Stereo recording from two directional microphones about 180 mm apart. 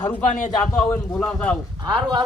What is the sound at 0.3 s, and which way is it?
Speech, 45° left (ahead or behind).